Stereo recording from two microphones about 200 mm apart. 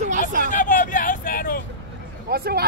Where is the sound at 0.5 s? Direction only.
40° left (ahead or behind).